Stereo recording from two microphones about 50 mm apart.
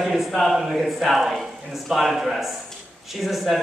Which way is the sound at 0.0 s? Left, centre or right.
Centre.